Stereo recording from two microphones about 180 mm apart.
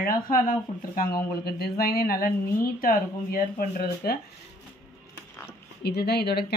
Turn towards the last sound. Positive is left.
turn(degrees=65)  # may be behind; listen again after turning